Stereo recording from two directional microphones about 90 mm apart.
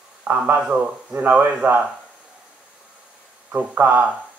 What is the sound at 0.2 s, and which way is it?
A man's voice, 20° right (ahead or behind).